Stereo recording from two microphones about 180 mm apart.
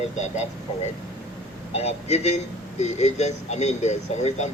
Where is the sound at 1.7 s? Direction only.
35° left (ahead or behind).